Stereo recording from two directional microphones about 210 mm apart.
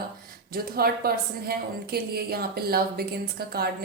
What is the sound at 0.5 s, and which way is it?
A woman's voice, 45° right (ahead or behind).